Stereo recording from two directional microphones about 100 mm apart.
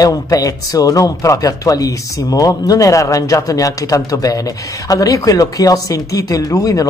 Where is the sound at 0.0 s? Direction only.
35° left (ahead or behind).